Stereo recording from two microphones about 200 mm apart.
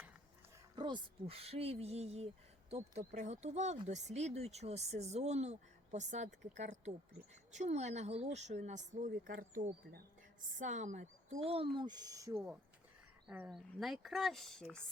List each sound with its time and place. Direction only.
0.8 s speech: 25° right (ahead or behind); by 14.8 s 5° left (ahead or behind)